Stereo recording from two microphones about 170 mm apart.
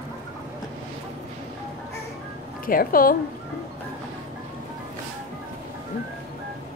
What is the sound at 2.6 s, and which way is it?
Speech, 55° left (ahead or behind).